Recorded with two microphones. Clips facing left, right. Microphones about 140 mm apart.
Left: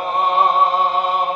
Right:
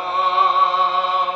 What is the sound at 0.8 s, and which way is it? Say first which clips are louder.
Chant: left 1 dB; 50° left (ahead or behind).